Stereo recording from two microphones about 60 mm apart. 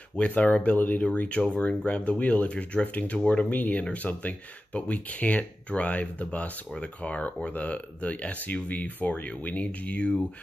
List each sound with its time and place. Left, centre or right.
0.2 s speech: left